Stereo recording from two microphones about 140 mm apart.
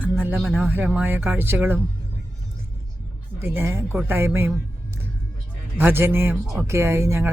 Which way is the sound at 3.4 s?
15° right (ahead or behind).